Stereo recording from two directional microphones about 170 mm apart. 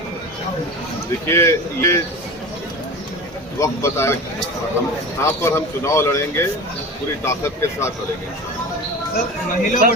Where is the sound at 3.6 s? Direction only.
15° left (ahead or behind).